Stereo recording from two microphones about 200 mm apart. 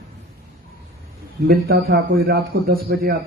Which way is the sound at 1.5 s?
50° right (ahead or behind).